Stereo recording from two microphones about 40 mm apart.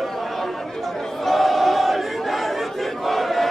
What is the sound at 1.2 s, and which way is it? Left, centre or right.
Crowd, centre.